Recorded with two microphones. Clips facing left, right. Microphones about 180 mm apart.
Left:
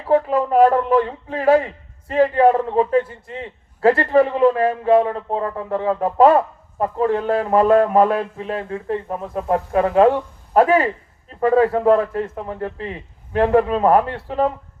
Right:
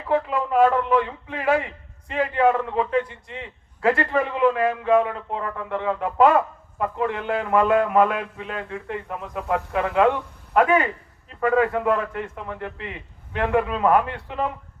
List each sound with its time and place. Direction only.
0.0 s speech: 40° left (ahead or behind)